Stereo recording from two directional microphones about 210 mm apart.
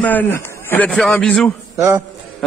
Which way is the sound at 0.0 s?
10° left (ahead or behind).